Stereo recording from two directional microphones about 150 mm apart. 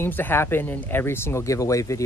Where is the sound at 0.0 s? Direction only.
15° left (ahead or behind).